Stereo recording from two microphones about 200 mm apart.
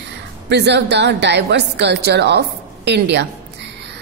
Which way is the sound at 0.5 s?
60° right (ahead or behind).